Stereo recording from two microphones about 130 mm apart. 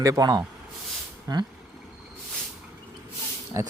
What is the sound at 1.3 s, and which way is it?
Vehicle, 30° right (ahead or behind).